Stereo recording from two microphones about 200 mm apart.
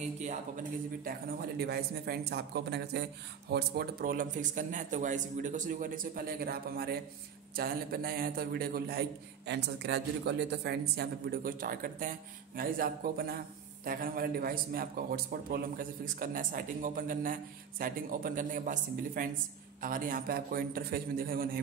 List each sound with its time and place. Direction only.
1.0 s speech: 50° right (ahead or behind)